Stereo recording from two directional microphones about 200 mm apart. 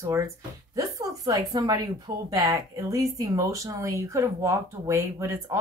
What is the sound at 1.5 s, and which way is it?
A woman's voice, 20° right (ahead or behind).